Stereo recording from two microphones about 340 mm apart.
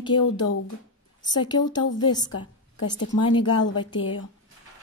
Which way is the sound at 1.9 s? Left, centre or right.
Centre.